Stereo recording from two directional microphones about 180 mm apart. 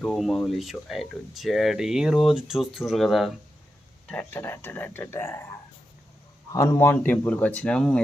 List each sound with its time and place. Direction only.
0.0 s speech: centre (ahead or behind)
6.5 s speech: 15° left (ahead or behind)